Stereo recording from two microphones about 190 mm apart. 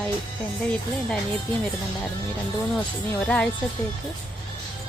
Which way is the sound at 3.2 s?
5° left (ahead or behind).